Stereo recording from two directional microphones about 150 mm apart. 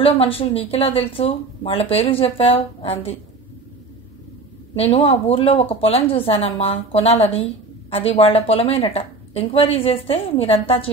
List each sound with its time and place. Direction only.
0.0 s speech: 40° left (ahead or behind)
4.7 s speech: 40° left (ahead or behind)